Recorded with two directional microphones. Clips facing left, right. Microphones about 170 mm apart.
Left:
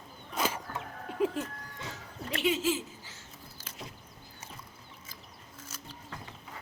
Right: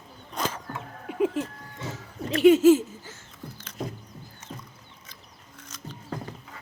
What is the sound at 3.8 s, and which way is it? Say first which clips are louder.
Vehicle: right 12 dB; 45° right (ahead or behind).